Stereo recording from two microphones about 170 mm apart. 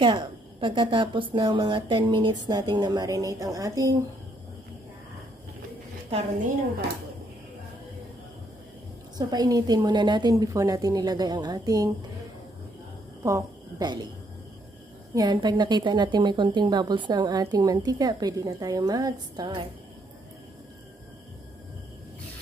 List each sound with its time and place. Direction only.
0.0 s a woman's voice: 30° right (ahead or behind)
9.3 s a woman's voice: 20° right (ahead or behind)
13.2 s a sound: 20° right (ahead or behind)
15.1 s a woman's voice: 25° right (ahead or behind)